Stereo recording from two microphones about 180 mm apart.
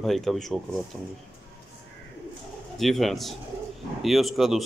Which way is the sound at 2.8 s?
Centre (ahead or behind).